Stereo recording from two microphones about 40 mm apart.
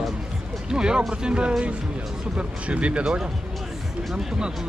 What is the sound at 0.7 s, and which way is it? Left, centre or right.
Speech, centre.